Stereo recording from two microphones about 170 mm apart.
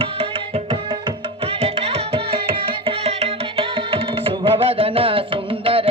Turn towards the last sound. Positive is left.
turn(degrees=-35)  # may be behind; listen again after turning